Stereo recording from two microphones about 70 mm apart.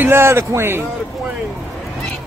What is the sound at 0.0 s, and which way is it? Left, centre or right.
Speech, right.